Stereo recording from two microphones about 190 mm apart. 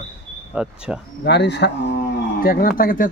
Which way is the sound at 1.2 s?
65° left (ahead or behind).